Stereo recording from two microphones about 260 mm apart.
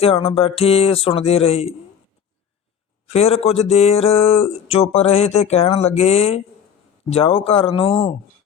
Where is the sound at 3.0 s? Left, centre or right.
Left.